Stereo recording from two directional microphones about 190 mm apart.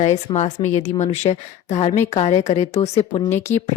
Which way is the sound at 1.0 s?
35° left (ahead or behind).